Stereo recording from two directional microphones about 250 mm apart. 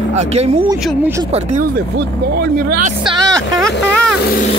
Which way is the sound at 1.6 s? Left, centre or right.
Right.